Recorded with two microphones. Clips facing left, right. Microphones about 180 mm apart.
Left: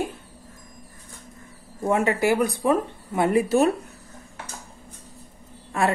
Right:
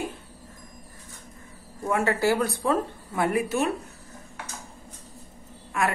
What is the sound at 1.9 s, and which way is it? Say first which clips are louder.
Speech: left 3 dB; 20° left (ahead or behind).